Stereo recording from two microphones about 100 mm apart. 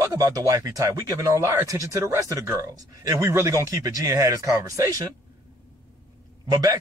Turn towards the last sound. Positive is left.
turn(degrees=-35)  # may be behind; listen again after turning